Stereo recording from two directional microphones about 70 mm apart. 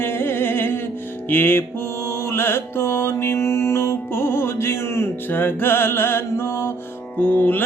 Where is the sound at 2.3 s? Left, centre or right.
Left.